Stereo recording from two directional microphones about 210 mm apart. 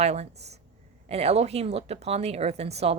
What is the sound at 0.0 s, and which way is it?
A woman's voice, 30° right (ahead or behind).